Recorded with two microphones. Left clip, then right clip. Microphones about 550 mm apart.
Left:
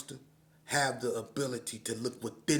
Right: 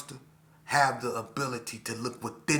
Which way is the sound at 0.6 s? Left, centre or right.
Left.